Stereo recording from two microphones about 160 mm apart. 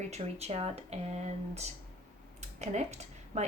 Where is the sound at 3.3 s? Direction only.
45° right (ahead or behind).